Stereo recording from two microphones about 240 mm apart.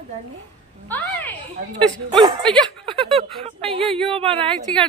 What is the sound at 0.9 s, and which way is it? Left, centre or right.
Speech, centre.